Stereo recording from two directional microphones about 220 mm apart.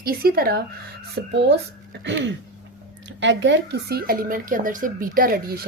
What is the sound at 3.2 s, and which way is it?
Speech, 55° right (ahead or behind).